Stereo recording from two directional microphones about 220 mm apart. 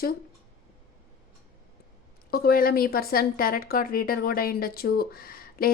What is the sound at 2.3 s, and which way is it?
Speech, 40° left (ahead or behind).